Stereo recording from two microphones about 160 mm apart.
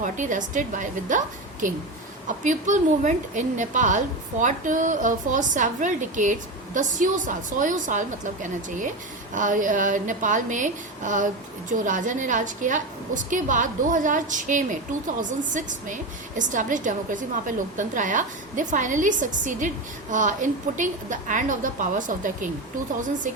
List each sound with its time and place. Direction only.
0.0 s a woman's voice: 50° right (ahead or behind)
2.2 s a woman's voice: 50° right (ahead or behind)